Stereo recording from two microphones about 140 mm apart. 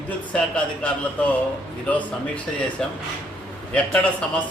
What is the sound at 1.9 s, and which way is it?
A man's voice, 10° left (ahead or behind).